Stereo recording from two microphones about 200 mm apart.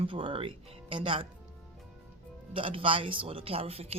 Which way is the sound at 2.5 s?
25° right (ahead or behind).